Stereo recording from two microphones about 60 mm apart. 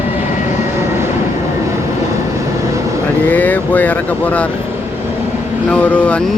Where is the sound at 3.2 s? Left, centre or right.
Left.